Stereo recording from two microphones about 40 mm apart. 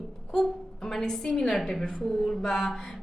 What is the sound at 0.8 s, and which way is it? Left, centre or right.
A woman's voice, centre.